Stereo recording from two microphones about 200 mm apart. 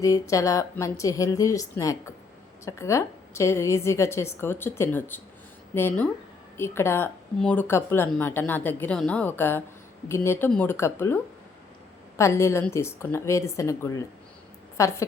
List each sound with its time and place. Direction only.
0.0 s speech: 15° left (ahead or behind)